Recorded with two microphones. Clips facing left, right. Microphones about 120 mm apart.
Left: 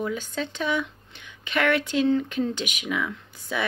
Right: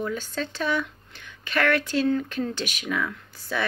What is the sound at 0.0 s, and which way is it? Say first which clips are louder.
Speech: even; 15° left (ahead or behind).